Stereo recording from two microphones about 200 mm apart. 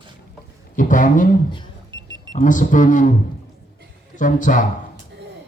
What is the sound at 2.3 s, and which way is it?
Speech, 40° left (ahead or behind).